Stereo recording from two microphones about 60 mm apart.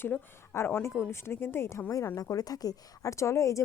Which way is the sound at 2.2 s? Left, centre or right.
Left.